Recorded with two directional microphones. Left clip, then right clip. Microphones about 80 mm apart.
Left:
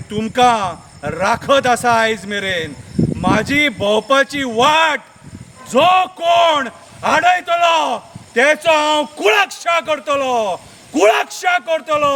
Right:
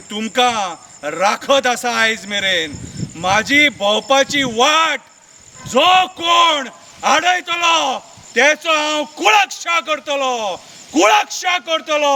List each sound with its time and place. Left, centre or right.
0.1 s a man's voice: left